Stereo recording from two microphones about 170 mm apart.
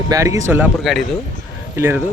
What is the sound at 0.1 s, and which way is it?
Speech, 20° right (ahead or behind).